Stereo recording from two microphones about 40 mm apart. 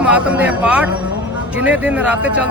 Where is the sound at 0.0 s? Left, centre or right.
Right.